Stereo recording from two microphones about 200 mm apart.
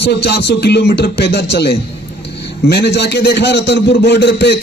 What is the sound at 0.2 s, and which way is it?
A man's voice, 55° left (ahead or behind).